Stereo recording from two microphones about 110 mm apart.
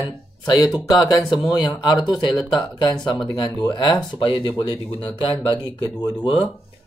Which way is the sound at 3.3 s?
45° left (ahead or behind).